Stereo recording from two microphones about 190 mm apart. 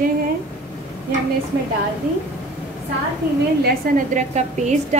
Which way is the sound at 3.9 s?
50° right (ahead or behind).